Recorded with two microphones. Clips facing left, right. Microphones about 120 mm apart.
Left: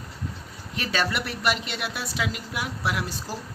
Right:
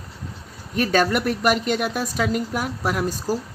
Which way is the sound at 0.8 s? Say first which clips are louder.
Right 8 dB; 50° right (ahead or behind).